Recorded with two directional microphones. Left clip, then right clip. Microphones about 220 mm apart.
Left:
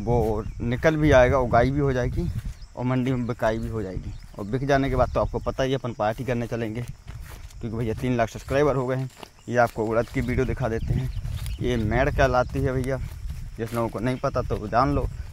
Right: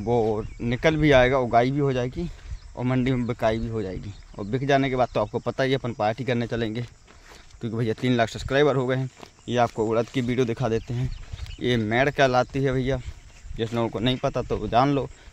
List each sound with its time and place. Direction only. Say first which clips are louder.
0.0 s speech: right 1 dB; centre (ahead or behind)
2.7 s speech: right 1 dB; 10° right (ahead or behind)